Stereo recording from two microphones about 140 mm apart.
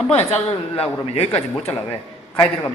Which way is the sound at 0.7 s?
45° left (ahead or behind).